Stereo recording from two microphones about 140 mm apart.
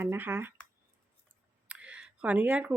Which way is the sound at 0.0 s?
15° right (ahead or behind).